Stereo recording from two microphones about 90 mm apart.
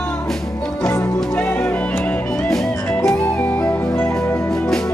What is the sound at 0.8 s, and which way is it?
Music, 20° left (ahead or behind).